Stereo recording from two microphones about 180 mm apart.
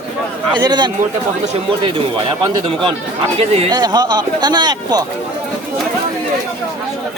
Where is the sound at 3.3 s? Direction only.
35° right (ahead or behind).